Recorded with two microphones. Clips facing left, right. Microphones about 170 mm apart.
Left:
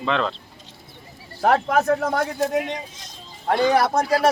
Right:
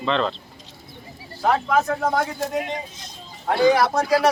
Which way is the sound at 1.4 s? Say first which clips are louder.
Left 2 dB; 55° left (ahead or behind).